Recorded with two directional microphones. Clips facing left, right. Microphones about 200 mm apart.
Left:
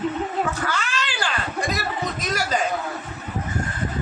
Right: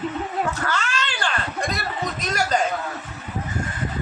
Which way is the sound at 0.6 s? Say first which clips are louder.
Right 1 dB; 10° left (ahead or behind).